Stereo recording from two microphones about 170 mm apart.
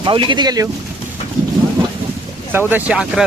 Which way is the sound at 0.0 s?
30° right (ahead or behind).